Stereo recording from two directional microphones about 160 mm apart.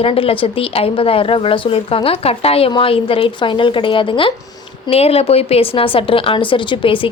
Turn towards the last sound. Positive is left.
turn(degrees=35)  # may be behind; listen again after turning